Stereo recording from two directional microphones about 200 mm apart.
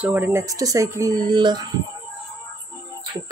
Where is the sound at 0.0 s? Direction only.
10° right (ahead or behind).